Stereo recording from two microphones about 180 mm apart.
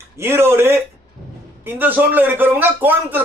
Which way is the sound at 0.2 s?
15° right (ahead or behind).